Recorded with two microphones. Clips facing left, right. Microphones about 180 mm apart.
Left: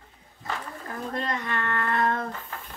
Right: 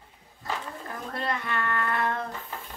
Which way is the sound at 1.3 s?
35° left (ahead or behind).